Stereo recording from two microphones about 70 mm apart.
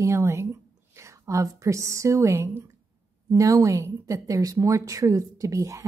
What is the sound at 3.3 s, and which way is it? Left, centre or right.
A woman's voice, right.